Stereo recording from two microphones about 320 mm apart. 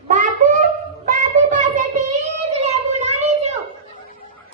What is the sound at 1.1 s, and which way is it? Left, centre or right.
Child singing, right.